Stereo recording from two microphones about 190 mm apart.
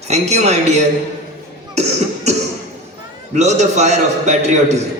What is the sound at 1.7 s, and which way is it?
Cough, 35° right (ahead or behind).